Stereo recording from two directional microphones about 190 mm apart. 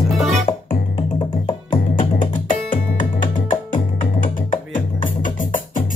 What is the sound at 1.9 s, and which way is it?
Music, 45° left (ahead or behind).